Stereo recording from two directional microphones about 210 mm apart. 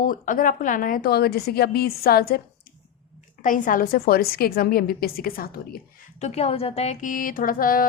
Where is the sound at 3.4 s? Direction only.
40° left (ahead or behind).